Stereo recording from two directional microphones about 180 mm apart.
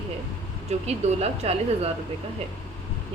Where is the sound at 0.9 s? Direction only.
35° right (ahead or behind).